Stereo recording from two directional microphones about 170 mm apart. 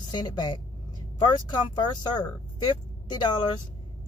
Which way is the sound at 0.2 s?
25° left (ahead or behind).